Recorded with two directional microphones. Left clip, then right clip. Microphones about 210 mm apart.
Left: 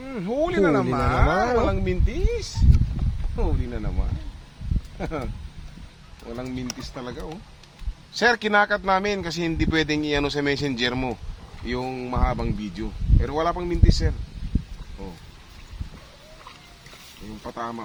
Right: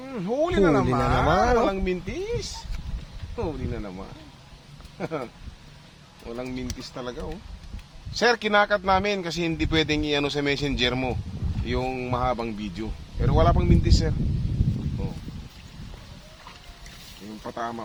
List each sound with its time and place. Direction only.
0.1 s speech: 20° left (ahead or behind)
1.3 s speech: 10° right (ahead or behind)
1.6 s speech: 20° left (ahead or behind)
4.9 s speech: 25° left (ahead or behind); by 14.1 s 5° left (ahead or behind)
17.4 s speech: 10° left (ahead or behind)